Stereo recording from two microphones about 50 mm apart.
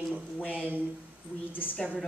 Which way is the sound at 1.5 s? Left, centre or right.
Left.